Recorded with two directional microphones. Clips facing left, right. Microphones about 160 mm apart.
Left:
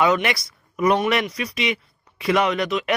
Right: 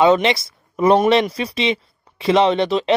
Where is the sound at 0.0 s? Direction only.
25° right (ahead or behind).